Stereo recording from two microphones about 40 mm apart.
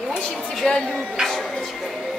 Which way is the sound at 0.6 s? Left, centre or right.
Left.